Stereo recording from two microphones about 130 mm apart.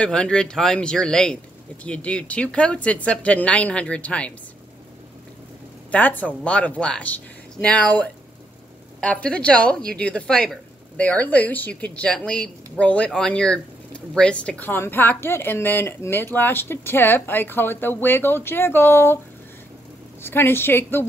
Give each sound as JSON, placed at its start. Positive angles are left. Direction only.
{"t": 0.0, "sound": "a woman's voice", "side_deg": 10}
{"t": 5.9, "sound": "a woman's voice", "side_deg": 10}
{"t": 20.2, "sound": "a woman's voice", "side_deg": 15}